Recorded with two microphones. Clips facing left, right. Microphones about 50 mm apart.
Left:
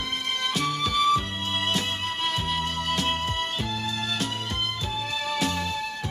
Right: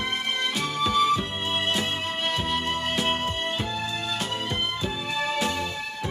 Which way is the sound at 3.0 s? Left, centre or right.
Centre.